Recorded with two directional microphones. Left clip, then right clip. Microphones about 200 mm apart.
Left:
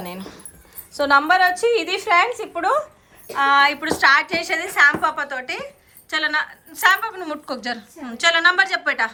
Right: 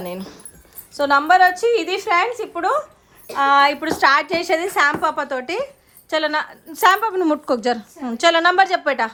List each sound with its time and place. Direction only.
0.0 s a woman's voice: 20° right (ahead or behind)